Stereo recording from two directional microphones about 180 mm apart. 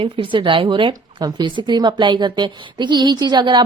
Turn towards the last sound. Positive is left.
turn(degrees=-25)  # may be behind; listen again after turning